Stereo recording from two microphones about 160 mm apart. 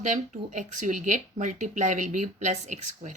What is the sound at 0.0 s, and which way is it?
Speech, 50° right (ahead or behind).